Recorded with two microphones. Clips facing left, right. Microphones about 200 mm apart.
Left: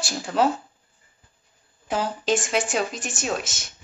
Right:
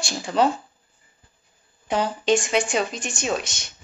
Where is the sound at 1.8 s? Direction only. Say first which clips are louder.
Right 3 dB; centre (ahead or behind).